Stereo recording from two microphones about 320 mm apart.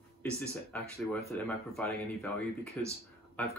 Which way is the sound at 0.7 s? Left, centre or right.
Centre.